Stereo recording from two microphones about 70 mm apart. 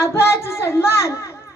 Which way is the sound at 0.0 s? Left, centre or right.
Left.